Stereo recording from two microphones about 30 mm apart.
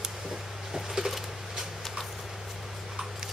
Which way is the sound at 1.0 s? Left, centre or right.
Right.